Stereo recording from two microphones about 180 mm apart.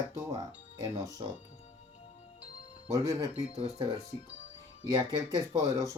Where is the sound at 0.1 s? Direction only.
20° right (ahead or behind).